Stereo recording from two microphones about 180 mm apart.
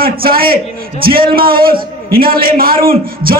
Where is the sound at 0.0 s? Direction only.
55° right (ahead or behind).